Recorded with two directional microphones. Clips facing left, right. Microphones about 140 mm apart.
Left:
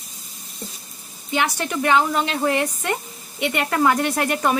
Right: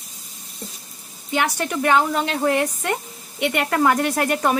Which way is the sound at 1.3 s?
45° right (ahead or behind).